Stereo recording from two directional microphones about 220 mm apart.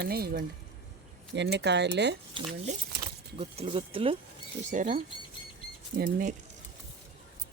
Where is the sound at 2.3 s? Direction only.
30° right (ahead or behind).